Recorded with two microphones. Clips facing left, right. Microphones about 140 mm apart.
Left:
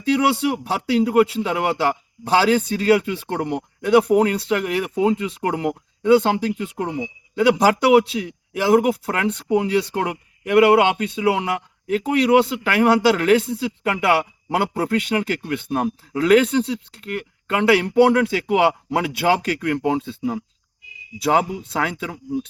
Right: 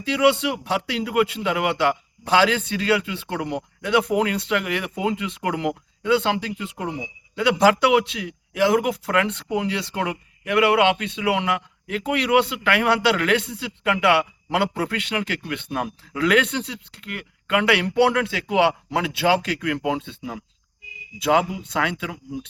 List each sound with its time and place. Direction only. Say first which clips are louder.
0.0 s a man's voice: left 1 dB; 40° left (ahead or behind)
21.8 s a man's voice: even; 35° left (ahead or behind)